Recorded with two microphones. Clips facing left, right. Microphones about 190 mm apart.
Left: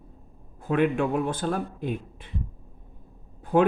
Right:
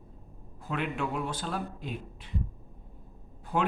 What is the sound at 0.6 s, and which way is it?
A man's voice, 50° left (ahead or behind).